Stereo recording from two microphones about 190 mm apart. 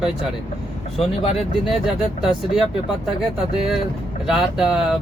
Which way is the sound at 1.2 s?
30° left (ahead or behind).